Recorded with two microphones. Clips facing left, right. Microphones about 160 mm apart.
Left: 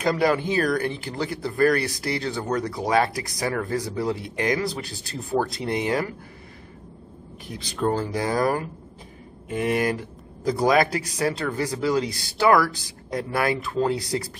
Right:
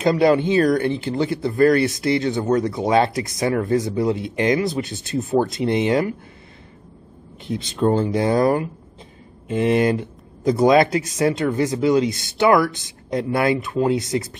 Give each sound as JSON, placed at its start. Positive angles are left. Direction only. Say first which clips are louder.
{"t": 0.0, "sound": "speech", "louder": "right 5 dB", "side_deg": -25}
{"t": 7.4, "sound": "speech", "louder": "right 5 dB", "side_deg": -25}